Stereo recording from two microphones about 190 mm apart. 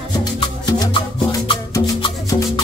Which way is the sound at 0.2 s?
20° left (ahead or behind).